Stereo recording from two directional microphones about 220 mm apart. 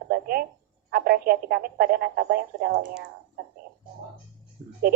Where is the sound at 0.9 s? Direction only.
45° right (ahead or behind).